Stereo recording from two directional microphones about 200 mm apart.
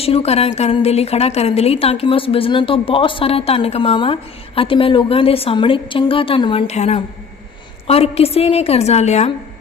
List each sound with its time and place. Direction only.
0.0 s a woman's voice: 30° left (ahead or behind)